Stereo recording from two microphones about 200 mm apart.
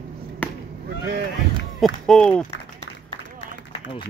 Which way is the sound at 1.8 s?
5° left (ahead or behind).